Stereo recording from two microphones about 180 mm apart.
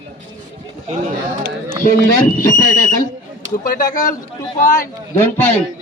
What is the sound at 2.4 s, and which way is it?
Speech, 20° left (ahead or behind).